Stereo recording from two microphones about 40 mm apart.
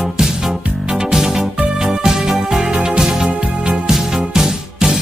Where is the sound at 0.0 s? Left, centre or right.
Centre.